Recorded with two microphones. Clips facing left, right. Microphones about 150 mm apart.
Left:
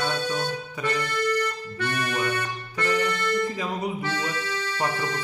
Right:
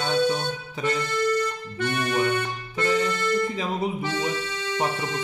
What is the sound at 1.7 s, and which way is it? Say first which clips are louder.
Music: right 5 dB; 25° right (ahead or behind).